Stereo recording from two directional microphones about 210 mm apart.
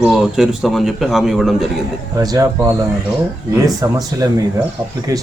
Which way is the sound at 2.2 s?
20° right (ahead or behind).